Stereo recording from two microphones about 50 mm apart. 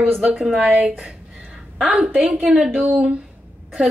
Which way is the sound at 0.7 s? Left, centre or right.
Right.